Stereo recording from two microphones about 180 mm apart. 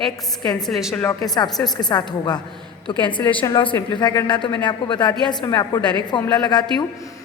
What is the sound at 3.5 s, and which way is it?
A woman's voice, 25° left (ahead or behind).